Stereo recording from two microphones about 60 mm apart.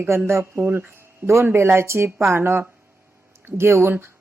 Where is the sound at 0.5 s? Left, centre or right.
Right.